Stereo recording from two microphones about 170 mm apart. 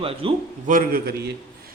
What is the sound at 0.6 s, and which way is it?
Speech, 55° right (ahead or behind).